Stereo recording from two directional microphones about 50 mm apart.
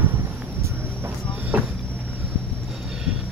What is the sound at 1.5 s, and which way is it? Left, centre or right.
Vehicle, right.